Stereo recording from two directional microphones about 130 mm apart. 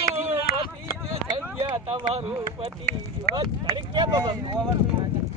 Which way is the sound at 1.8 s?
50° right (ahead or behind).